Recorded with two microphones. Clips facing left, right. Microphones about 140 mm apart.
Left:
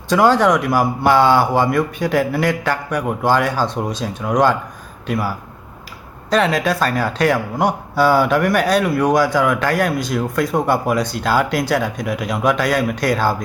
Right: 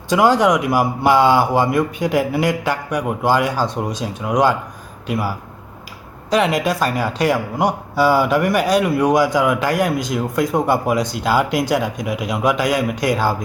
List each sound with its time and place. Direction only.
0.1 s speech: 15° right (ahead or behind)
6.3 s speech: 15° right (ahead or behind)